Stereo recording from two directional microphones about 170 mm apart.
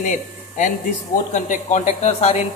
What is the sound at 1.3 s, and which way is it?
Speech, 45° left (ahead or behind).